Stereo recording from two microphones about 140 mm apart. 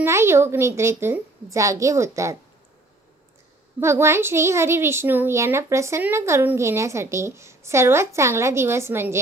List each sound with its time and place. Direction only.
0.0 s a child's voice: 20° right (ahead or behind)
3.8 s a child's voice: 20° right (ahead or behind)